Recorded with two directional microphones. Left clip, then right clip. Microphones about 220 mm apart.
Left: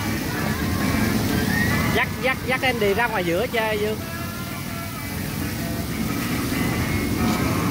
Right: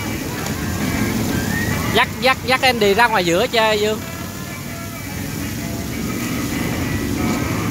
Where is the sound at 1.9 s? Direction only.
25° right (ahead or behind).